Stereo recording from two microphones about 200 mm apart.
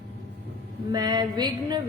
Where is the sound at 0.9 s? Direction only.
20° right (ahead or behind).